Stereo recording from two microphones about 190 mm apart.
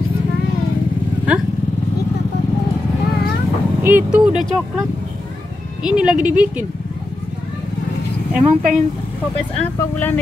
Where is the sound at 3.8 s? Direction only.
5° right (ahead or behind).